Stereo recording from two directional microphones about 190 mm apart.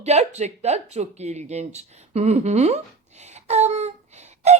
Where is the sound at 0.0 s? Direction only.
35° right (ahead or behind).